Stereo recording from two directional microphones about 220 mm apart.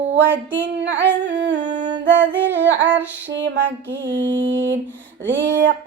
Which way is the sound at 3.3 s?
55° right (ahead or behind).